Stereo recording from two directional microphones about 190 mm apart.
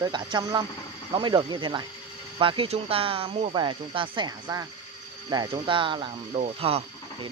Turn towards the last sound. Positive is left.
turn(degrees=-30)  # may be behind; listen again after turning